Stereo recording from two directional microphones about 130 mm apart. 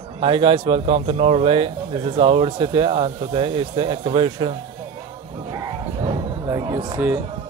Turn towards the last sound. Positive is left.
turn(degrees=-25)  # may be behind; listen again after turning